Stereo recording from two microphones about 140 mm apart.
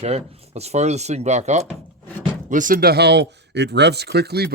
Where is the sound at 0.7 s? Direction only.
50° right (ahead or behind).